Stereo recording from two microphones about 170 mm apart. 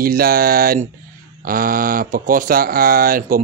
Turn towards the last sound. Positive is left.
turn(degrees=-55)  # may be behind; listen again after turning